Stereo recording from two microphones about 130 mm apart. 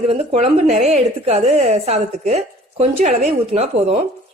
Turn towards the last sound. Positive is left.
turn(degrees=-55)  # may be behind; listen again after turning